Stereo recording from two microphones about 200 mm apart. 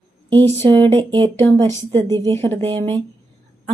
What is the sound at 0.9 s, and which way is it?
Speech, 25° right (ahead or behind).